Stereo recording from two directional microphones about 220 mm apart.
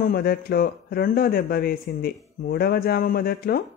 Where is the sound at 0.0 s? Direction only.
40° left (ahead or behind).